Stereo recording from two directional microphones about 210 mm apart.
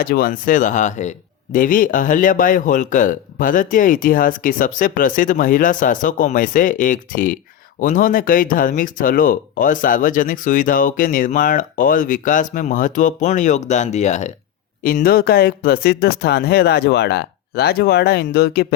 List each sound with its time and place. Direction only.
0.0 s speech: 45° left (ahead or behind)
14.8 s speech: 45° left (ahead or behind)